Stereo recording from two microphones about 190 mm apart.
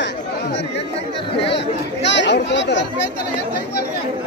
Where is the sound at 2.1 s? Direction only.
70° left (ahead or behind).